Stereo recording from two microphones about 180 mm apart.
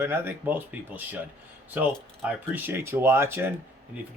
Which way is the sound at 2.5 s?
10° right (ahead or behind).